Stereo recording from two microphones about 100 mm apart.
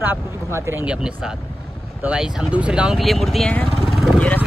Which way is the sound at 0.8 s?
10° right (ahead or behind).